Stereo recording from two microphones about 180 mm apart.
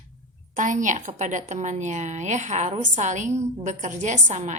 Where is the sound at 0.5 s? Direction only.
45° right (ahead or behind).